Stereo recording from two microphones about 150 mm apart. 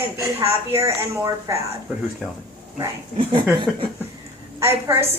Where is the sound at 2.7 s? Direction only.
30° right (ahead or behind).